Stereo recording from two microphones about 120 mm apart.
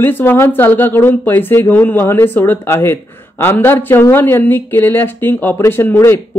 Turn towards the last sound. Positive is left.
turn(degrees=20)  # may be behind; listen again after turning